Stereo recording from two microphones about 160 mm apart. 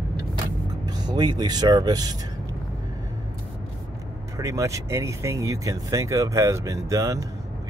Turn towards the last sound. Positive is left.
turn(degrees=-20)  # may be behind; listen again after turning